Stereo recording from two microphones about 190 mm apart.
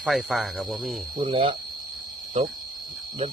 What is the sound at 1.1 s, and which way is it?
Speech, 30° right (ahead or behind).